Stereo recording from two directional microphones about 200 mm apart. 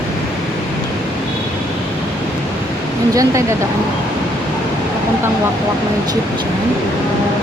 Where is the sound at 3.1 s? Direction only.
15° right (ahead or behind).